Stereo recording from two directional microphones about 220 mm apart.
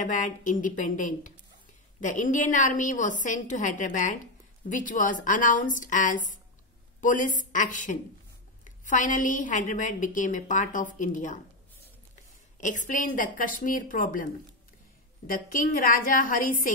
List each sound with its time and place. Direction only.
0.0 s a woman's voice: 35° left (ahead or behind)
12.5 s a woman's voice: 35° left (ahead or behind)